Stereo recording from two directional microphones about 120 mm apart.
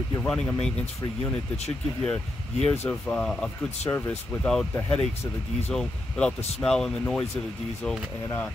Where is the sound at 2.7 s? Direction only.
20° left (ahead or behind).